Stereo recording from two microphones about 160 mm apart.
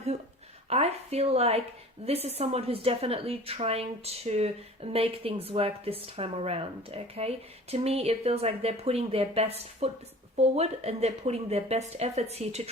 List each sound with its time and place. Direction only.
0.7 s a woman's voice: 40° right (ahead or behind)